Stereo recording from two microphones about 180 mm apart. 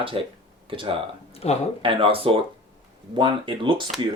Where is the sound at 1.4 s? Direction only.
35° left (ahead or behind).